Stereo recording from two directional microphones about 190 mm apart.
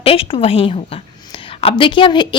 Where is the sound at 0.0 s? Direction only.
30° left (ahead or behind).